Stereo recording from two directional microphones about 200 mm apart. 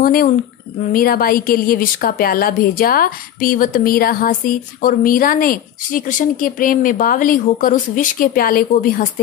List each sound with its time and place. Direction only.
0.0 s a woman's voice: 45° left (ahead or behind)